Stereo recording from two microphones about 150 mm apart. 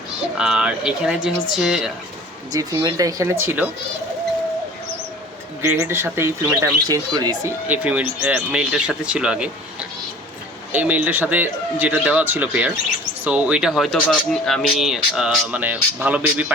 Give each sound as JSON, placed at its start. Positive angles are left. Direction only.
{"t": 0.3, "sound": "speech", "side_deg": -5}
{"t": 2.5, "sound": "speech", "side_deg": -25}
{"t": 5.6, "sound": "speech", "side_deg": -15}
{"t": 6.8, "sound": "speech", "side_deg": -25}
{"t": 7.7, "sound": "speech", "side_deg": -10}
{"t": 10.7, "sound": "speech", "side_deg": -10}